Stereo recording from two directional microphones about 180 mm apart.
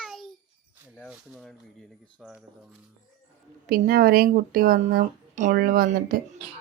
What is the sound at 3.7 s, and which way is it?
Speech, 55° right (ahead or behind).